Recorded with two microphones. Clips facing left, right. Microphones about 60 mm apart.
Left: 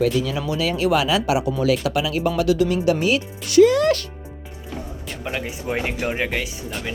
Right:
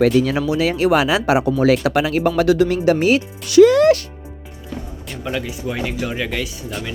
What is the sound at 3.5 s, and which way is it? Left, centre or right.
Speech, right.